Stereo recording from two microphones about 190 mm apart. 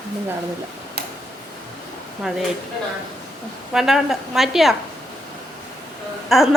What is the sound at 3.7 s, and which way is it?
A woman's voice, centre (ahead or behind).